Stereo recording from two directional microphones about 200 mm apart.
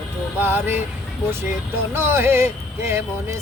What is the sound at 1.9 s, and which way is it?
Speech, 10° right (ahead or behind).